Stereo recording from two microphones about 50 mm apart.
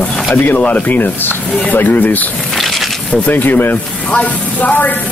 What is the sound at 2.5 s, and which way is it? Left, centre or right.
Insect, centre.